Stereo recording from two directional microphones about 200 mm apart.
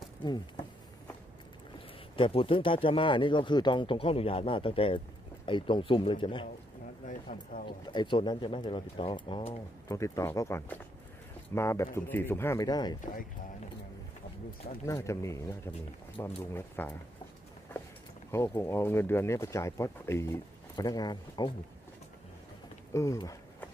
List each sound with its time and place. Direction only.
2.1 s speech: 25° left (ahead or behind)
7.1 s speech: 45° left (ahead or behind)
7.6 s speech: 20° left (ahead or behind)
9.8 s speech: 15° left (ahead or behind)
14.9 s speech: 15° left (ahead or behind)
18.3 s speech: 10° left (ahead or behind)
22.9 s speech: 15° left (ahead or behind)